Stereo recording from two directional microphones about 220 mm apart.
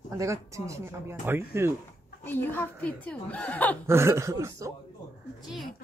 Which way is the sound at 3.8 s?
10° right (ahead or behind).